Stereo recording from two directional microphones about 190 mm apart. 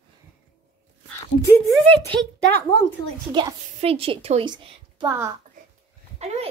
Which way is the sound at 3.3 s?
25° right (ahead or behind).